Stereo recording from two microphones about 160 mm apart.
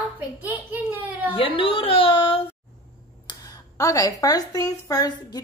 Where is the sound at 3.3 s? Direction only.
20° left (ahead or behind).